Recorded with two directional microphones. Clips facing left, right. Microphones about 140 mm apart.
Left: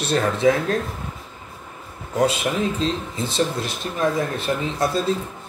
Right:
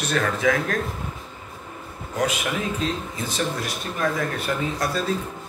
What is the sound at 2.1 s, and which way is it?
A man's voice, 30° left (ahead or behind).